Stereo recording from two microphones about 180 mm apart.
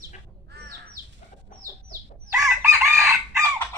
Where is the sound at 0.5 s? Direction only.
65° right (ahead or behind).